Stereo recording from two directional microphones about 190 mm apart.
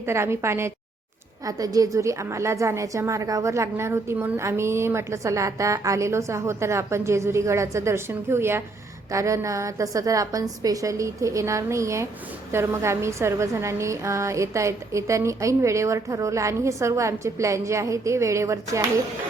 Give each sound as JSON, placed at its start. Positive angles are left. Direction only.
{"t": 0.0, "sound": "a woman's voice", "side_deg": -15}